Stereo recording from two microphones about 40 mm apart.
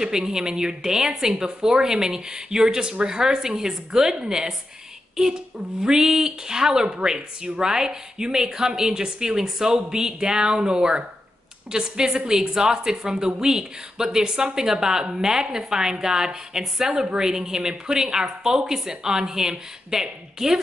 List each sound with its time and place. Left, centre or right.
0.0 s speech: centre